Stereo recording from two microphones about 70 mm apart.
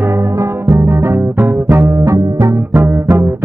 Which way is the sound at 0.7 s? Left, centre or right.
Right.